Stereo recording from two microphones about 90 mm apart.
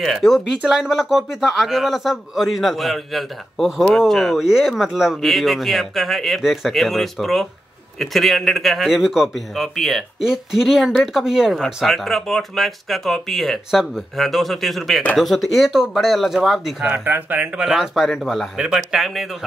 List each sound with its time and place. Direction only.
0.0 s a man's voice: centre (ahead or behind)
16.9 s speech: 20° right (ahead or behind)
17.6 s a man's voice: 5° right (ahead or behind)